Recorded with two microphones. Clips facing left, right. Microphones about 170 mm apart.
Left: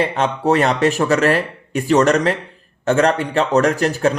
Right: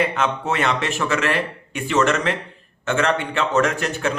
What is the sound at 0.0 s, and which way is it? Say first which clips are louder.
Speech: left 4 dB; 35° left (ahead or behind).